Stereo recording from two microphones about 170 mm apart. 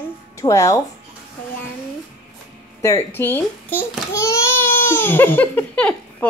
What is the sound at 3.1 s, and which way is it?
A child's voice, 10° left (ahead or behind).